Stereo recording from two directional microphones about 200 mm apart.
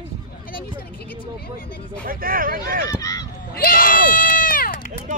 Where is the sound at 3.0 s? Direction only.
15° left (ahead or behind).